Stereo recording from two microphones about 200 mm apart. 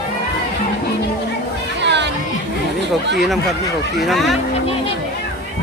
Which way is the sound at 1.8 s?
60° right (ahead or behind).